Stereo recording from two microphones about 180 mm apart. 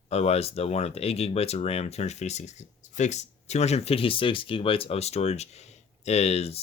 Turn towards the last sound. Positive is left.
turn(degrees=35)  # may be behind; listen again after turning